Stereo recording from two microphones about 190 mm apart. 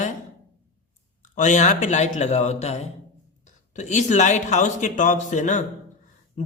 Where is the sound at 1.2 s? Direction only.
40° left (ahead or behind).